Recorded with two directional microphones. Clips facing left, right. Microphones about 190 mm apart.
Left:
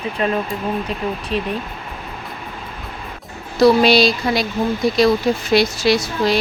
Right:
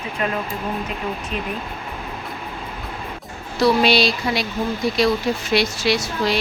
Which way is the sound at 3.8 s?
40° left (ahead or behind).